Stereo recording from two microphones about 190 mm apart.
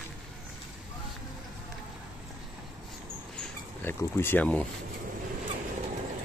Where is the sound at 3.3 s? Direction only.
10° left (ahead or behind).